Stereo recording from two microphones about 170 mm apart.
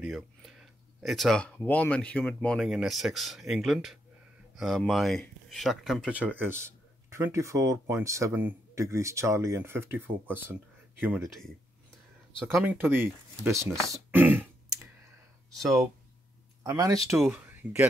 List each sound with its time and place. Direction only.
0.0 s speech: centre (ahead or behind)
12.6 s speech: 10° right (ahead or behind)
15.5 s speech: centre (ahead or behind)
16.6 s speech: 20° right (ahead or behind)